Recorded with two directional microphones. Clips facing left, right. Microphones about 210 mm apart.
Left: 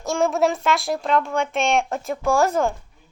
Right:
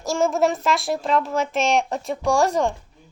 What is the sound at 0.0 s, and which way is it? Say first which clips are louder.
A child's voice: even; centre (ahead or behind).